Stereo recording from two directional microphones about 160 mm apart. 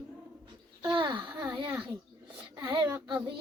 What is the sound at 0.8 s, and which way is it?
A woman's voice, 25° right (ahead or behind).